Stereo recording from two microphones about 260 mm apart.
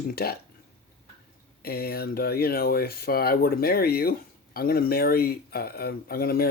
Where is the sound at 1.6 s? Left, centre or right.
Left.